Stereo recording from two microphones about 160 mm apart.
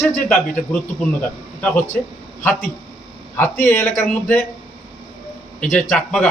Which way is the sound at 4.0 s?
10° left (ahead or behind).